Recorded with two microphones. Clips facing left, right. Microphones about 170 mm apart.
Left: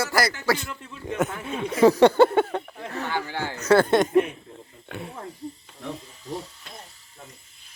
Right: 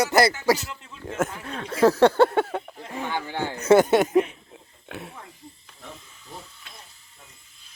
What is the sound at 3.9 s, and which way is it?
Speech, 10° right (ahead or behind).